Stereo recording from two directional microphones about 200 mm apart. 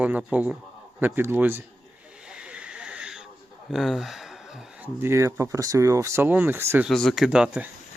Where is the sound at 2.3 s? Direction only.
5° right (ahead or behind).